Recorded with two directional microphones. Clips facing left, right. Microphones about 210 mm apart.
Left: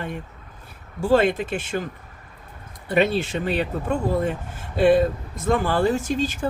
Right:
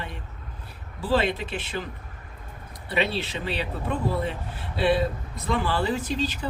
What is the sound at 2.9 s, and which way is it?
Speech, 50° left (ahead or behind).